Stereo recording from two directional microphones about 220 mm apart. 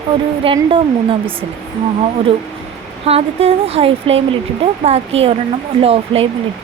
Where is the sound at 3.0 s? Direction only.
25° right (ahead or behind).